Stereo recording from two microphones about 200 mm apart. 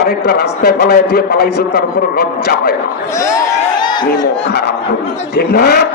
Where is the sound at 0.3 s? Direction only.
55° left (ahead or behind).